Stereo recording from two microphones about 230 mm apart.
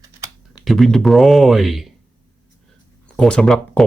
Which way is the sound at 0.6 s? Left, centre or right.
Centre.